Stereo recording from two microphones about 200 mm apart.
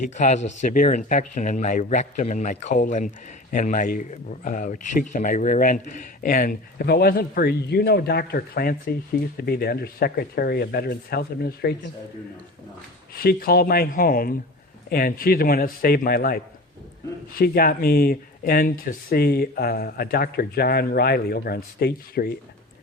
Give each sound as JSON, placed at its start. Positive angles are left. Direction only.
{"t": 0.2, "sound": "speech", "side_deg": 35}
{"t": 13.1, "sound": "speech", "side_deg": 50}